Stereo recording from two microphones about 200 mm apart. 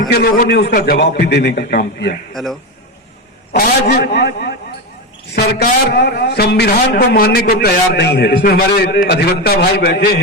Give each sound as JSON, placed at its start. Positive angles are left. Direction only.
{"t": 0.1, "sound": "a man's voice", "side_deg": 50}
{"t": 2.3, "sound": "a man's voice", "side_deg": 0}
{"t": 3.5, "sound": "a man's voice", "side_deg": 50}